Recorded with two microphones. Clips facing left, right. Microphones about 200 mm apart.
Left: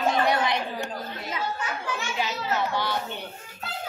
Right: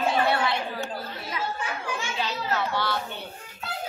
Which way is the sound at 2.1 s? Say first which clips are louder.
Left 1 dB; 15° left (ahead or behind).